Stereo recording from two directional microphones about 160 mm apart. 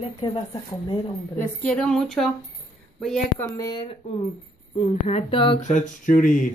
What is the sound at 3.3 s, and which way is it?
Speech, 20° left (ahead or behind).